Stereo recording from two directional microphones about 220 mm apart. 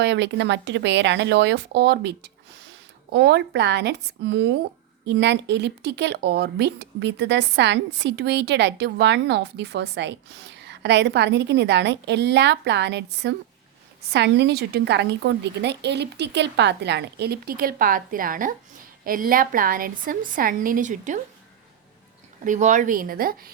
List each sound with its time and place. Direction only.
0.0 s a woman's voice: 50° right (ahead or behind); by 21.2 s 35° right (ahead or behind)
22.4 s a woman's voice: 35° right (ahead or behind)